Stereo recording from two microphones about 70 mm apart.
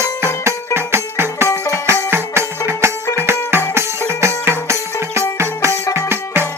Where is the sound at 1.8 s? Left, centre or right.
Right.